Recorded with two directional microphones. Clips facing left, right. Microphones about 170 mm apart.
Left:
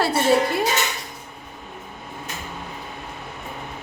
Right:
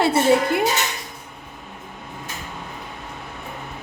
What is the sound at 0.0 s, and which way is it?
Speech, 20° right (ahead or behind).